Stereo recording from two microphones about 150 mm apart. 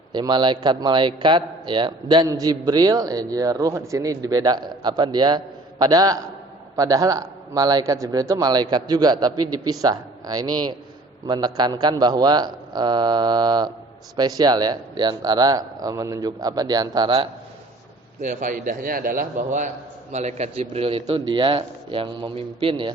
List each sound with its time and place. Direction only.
0.1 s a man's voice: 30° right (ahead or behind)
18.2 s a man's voice: 55° right (ahead or behind); by 22.9 s 35° right (ahead or behind)